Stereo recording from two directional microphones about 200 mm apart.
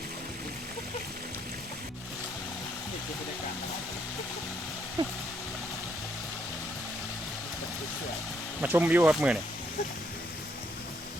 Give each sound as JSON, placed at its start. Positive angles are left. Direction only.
{"t": 5.0, "sound": "music", "side_deg": -20}
{"t": 8.6, "sound": "speech", "side_deg": -10}